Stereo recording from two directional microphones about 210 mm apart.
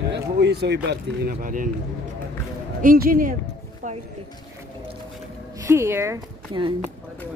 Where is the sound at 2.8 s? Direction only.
40° right (ahead or behind).